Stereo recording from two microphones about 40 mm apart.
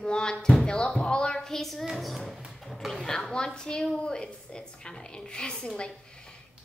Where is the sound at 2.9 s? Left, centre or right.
Centre.